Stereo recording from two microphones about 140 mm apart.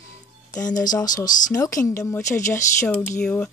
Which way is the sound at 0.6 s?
25° left (ahead or behind).